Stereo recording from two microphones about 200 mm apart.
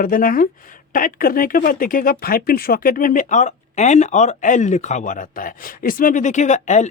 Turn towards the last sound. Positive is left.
turn(degrees=35)  # may be behind; listen again after turning